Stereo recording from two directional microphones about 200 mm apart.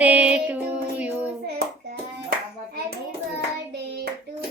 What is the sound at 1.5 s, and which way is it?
Hands, 55° right (ahead or behind).